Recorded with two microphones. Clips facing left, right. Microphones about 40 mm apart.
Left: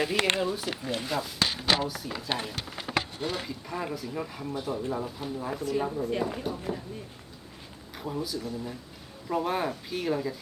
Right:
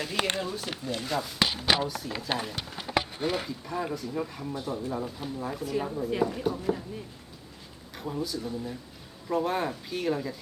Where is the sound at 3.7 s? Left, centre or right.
Centre.